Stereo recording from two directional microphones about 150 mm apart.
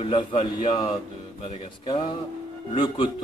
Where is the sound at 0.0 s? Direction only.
35° left (ahead or behind).